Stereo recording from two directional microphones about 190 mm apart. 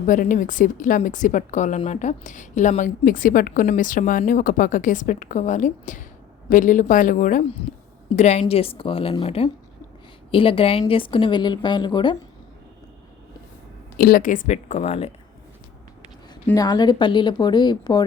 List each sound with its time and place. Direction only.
0.0 s a woman's voice: 45° left (ahead or behind); by 12.1 s 25° left (ahead or behind)
14.0 s a woman's voice: 50° left (ahead or behind)
16.6 s a woman's voice: 20° left (ahead or behind)